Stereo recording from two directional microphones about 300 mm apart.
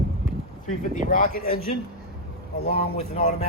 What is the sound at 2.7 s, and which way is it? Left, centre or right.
Speech, left.